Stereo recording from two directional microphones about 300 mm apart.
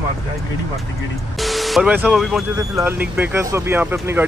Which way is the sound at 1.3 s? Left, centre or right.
Centre.